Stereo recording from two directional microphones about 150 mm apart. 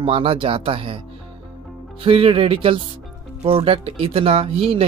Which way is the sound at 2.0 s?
35° right (ahead or behind).